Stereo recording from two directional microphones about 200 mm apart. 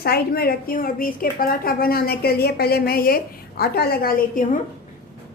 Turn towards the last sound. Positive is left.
turn(degrees=45)  # may be behind; listen again after turning